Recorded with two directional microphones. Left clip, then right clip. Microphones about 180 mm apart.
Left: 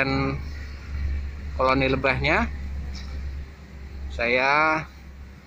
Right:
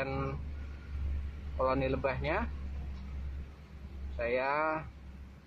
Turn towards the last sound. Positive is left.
turn(degrees=20)  # may be behind; listen again after turning